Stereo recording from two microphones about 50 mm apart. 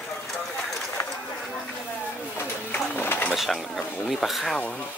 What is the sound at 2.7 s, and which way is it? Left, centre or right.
Sewing machine, left.